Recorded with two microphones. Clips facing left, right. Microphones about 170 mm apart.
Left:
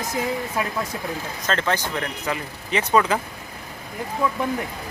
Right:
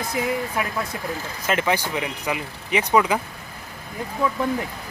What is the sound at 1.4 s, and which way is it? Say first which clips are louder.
Speech: right 2 dB; 10° right (ahead or behind).